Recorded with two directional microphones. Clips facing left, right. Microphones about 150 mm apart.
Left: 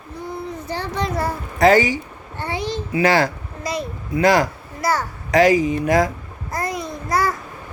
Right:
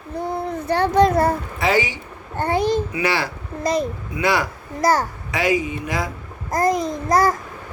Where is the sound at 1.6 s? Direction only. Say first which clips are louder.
Left 9 dB; 45° left (ahead or behind).